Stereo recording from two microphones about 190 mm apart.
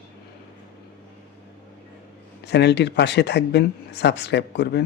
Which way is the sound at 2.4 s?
65° left (ahead or behind).